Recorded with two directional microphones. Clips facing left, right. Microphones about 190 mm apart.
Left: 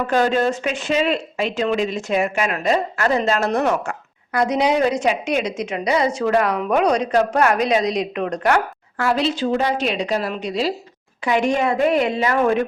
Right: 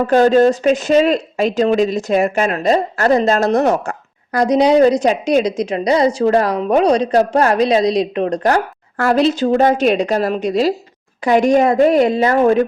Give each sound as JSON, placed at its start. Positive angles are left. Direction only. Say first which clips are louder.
{"t": 0.0, "sound": "speech", "louder": "right 7 dB", "side_deg": -40}